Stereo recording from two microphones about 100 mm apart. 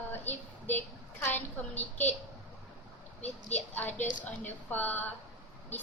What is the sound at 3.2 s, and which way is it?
A woman's voice, 15° left (ahead or behind).